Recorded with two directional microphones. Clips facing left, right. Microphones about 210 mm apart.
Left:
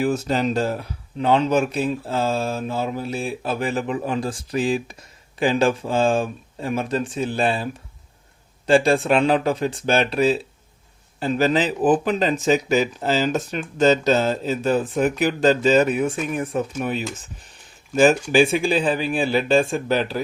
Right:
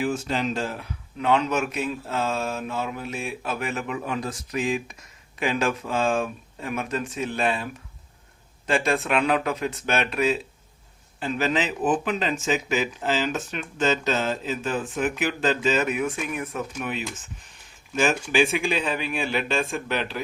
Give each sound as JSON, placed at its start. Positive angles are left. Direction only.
{"t": 0.0, "sound": "speech", "side_deg": 40}